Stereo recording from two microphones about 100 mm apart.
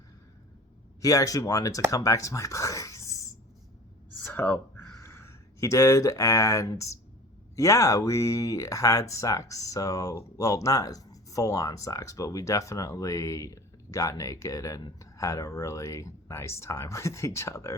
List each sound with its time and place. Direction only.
1.0 s speech: 35° left (ahead or behind)
4.4 s speech: 20° left (ahead or behind)